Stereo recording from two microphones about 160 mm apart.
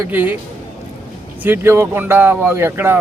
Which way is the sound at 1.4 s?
15° right (ahead or behind).